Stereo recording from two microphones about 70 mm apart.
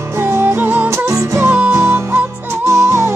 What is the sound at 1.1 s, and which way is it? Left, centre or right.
Music, right.